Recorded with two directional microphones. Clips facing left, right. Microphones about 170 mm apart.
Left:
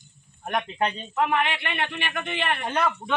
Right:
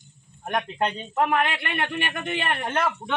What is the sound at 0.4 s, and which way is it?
Speech, 5° left (ahead or behind).